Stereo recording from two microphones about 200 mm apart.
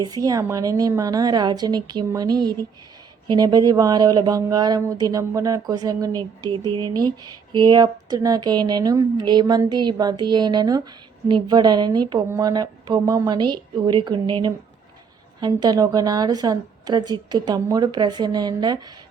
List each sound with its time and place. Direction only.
0.0 s speech: 20° right (ahead or behind)